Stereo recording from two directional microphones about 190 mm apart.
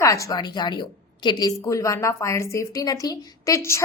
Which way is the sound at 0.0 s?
15° left (ahead or behind).